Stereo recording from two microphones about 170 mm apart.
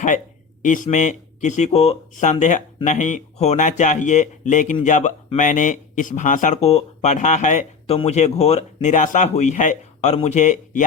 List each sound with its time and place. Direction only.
0.6 s speech: 50° left (ahead or behind)